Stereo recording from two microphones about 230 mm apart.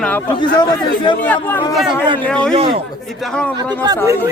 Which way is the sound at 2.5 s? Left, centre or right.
Right.